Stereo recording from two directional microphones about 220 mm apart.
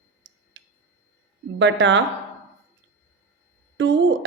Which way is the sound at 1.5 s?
55° right (ahead or behind).